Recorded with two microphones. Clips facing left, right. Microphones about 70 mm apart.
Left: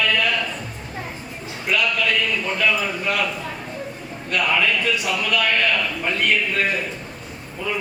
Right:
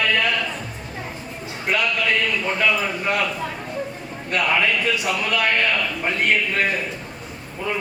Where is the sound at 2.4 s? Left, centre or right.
Right.